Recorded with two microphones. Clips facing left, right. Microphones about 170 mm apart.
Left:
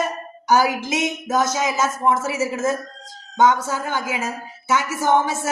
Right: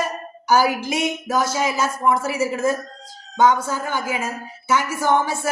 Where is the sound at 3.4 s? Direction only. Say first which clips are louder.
Even; 20° left (ahead or behind).